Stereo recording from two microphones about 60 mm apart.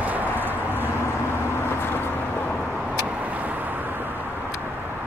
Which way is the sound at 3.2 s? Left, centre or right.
Right.